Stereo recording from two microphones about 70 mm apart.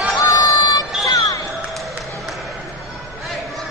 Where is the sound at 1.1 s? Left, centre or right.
Left.